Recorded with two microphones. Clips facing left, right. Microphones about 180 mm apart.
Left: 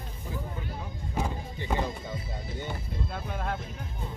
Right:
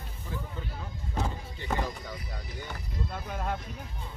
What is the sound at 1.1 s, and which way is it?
Music, 15° left (ahead or behind).